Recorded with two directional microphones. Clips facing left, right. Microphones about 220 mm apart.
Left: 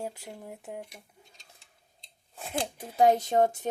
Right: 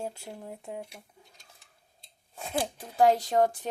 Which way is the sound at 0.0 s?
5° left (ahead or behind).